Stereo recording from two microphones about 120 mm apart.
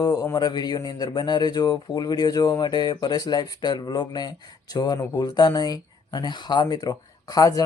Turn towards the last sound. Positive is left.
turn(degrees=30)  # may be behind; listen again after turning